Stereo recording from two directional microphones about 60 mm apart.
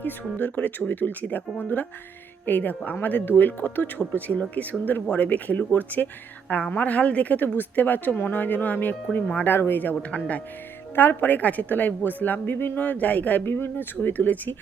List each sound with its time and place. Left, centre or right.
0.0 s a woman's voice: left
9.5 s a woman's voice: left
10.9 s speech: left
13.4 s speech: left